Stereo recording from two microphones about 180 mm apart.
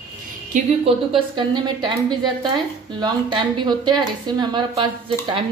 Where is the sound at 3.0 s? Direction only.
25° right (ahead or behind).